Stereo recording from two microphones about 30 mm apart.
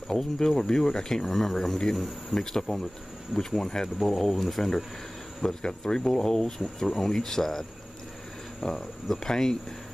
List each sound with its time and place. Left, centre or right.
0.1 s speech: centre
5.4 s speech: left
8.6 s speech: centre